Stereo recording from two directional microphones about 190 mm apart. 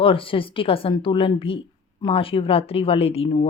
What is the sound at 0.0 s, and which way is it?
Speech, 30° left (ahead or behind).